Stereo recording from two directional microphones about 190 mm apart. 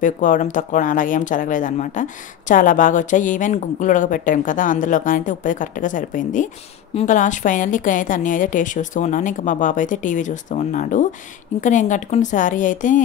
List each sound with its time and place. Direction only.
0.0 s a woman's voice: 40° left (ahead or behind)